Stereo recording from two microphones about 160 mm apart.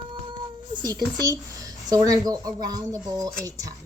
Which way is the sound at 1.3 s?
25° right (ahead or behind).